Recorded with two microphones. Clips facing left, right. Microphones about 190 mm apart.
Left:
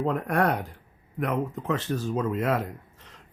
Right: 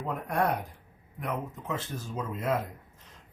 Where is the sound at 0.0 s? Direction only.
70° left (ahead or behind).